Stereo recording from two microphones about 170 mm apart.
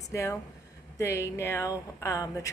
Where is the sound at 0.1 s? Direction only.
15° left (ahead or behind).